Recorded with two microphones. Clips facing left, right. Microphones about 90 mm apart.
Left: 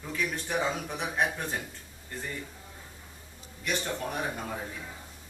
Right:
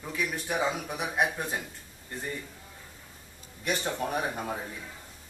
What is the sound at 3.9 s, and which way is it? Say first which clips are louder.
Speech: right 2 dB; 20° right (ahead or behind).